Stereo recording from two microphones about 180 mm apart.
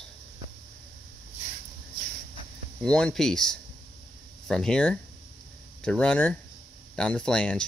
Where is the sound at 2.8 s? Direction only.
5° left (ahead or behind).